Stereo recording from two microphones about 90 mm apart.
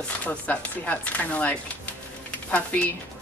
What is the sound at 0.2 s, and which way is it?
A woman's voice, 15° left (ahead or behind).